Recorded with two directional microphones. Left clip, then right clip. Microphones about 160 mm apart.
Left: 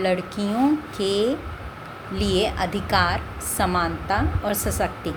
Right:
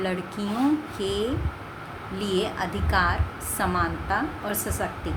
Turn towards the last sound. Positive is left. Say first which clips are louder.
# left 4 dB
turn(degrees=35)  # may be behind; listen again after turning